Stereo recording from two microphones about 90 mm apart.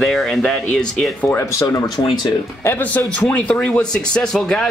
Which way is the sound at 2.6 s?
20° left (ahead or behind).